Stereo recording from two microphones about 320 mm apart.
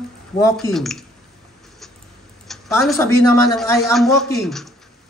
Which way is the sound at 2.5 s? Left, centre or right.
Centre.